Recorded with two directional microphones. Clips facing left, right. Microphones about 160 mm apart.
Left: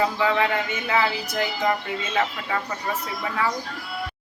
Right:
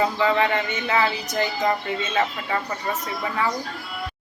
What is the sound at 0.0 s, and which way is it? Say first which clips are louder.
A woman's voice: right 1 dB; centre (ahead or behind).